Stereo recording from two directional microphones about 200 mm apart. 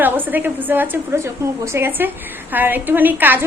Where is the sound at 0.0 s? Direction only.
10° right (ahead or behind).